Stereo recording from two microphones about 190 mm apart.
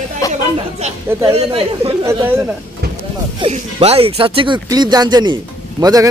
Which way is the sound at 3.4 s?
30° right (ahead or behind).